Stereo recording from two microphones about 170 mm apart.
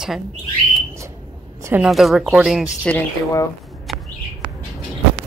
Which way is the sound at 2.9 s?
20° left (ahead or behind).